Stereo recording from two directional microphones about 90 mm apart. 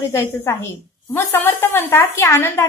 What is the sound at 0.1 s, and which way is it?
A woman's voice, 30° left (ahead or behind).